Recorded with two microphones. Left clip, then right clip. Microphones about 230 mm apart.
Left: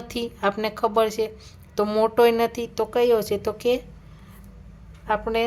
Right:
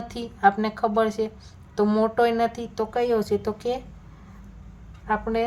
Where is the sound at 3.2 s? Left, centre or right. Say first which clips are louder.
Even; left.